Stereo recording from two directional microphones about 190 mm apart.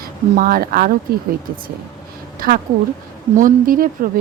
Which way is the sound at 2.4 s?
50° right (ahead or behind).